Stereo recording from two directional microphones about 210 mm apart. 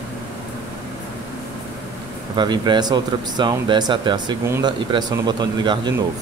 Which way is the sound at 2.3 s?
20° right (ahead or behind).